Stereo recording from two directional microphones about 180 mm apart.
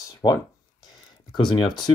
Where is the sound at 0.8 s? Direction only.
25° left (ahead or behind).